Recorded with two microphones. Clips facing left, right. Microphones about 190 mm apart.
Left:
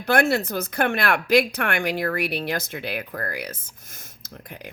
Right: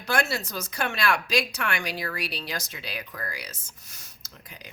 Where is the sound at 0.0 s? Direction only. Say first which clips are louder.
Left 7 dB; 55° left (ahead or behind).